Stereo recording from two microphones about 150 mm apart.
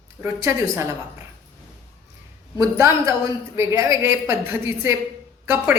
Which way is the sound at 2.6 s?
20° right (ahead or behind).